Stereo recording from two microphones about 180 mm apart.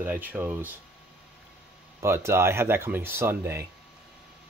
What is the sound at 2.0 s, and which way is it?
Speech, 15° right (ahead or behind).